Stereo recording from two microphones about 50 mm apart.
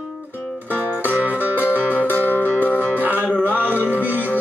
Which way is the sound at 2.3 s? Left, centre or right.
Left.